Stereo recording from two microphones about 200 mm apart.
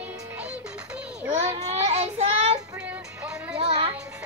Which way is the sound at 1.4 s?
35° right (ahead or behind).